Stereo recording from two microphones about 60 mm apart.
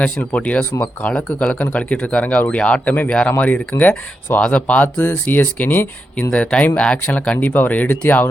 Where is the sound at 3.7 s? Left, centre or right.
Left.